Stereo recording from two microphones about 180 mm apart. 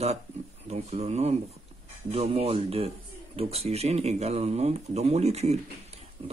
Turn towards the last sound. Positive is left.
turn(degrees=-35)  # may be behind; listen again after turning